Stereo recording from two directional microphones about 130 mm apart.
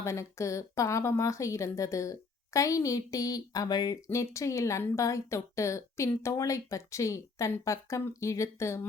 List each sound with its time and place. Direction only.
0.0 s a woman's voice: 20° left (ahead or behind)